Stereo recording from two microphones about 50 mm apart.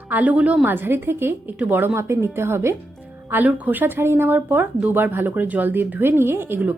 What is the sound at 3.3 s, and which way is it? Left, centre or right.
Speech, right.